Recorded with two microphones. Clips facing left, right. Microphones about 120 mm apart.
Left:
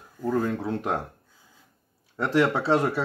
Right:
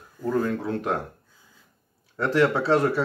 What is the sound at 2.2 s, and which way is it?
Speech, 20° left (ahead or behind).